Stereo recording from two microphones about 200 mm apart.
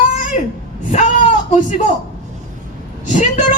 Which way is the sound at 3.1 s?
40° left (ahead or behind).